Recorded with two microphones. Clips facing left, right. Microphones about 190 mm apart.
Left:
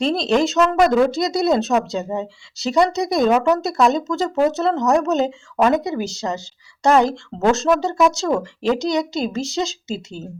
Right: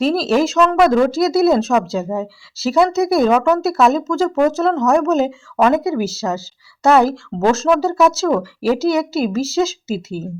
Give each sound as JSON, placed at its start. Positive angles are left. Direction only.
{"t": 0.0, "sound": "speech", "side_deg": -5}